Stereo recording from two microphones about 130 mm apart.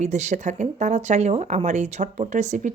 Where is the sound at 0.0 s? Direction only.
65° right (ahead or behind).